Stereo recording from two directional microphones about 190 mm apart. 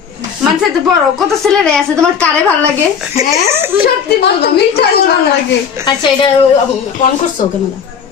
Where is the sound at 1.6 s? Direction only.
5° left (ahead or behind).